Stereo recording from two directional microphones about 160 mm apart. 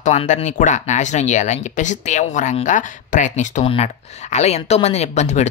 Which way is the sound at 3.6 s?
35° left (ahead or behind).